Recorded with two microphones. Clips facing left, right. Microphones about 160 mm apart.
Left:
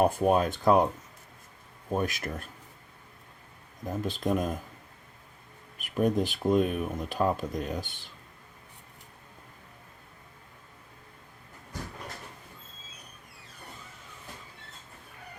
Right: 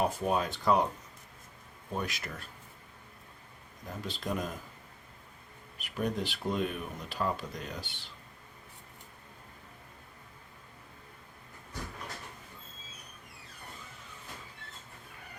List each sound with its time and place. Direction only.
0.0 s speech: 50° left (ahead or behind)
1.9 s speech: 50° left (ahead or behind)
4.0 s speech: 50° left (ahead or behind)
5.8 s speech: 45° left (ahead or behind)